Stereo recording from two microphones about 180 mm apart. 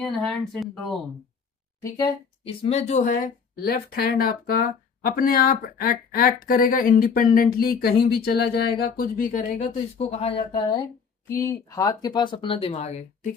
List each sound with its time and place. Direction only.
0.0 s speech: centre (ahead or behind)
2.4 s a woman's voice: 30° left (ahead or behind)